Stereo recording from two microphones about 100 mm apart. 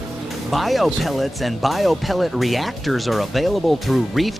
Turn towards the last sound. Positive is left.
turn(degrees=0)  # may be behind; listen again after turning